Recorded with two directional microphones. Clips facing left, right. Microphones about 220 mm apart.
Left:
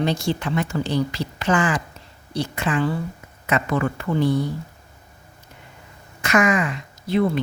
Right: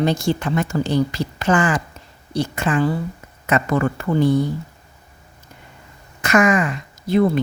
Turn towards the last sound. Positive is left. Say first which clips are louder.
# right 4 dB
turn(degrees=-45)  # may be behind; listen again after turning